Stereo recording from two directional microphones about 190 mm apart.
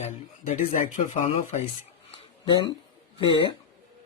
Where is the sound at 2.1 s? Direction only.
25° left (ahead or behind).